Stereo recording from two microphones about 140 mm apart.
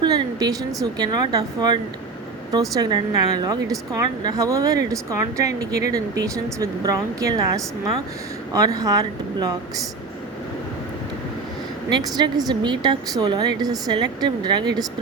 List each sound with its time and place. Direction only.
0.0 s speech: 30° right (ahead or behind)
11.9 s a woman's voice: 30° right (ahead or behind)